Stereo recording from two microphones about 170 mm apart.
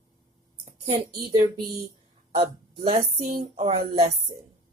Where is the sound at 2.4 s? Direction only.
35° right (ahead or behind).